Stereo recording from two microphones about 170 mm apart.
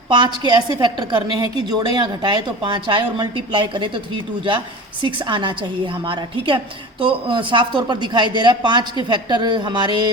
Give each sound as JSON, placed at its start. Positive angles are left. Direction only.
{"t": 0.1, "sound": "a woman's voice", "side_deg": -25}